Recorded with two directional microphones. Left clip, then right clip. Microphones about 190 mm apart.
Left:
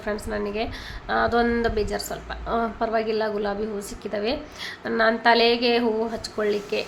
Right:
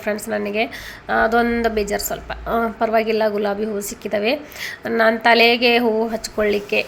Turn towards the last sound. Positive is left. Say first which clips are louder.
# right 6 dB
turn(degrees=-20)  # may be behind; listen again after turning